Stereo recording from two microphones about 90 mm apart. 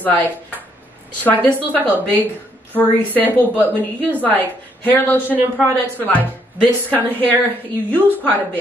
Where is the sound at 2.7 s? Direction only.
20° left (ahead or behind).